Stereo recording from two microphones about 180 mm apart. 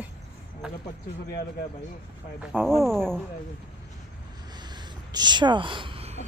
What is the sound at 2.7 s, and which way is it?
Speech, centre (ahead or behind).